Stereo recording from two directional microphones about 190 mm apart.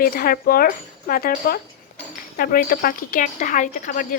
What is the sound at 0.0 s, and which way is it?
Speech, 50° left (ahead or behind).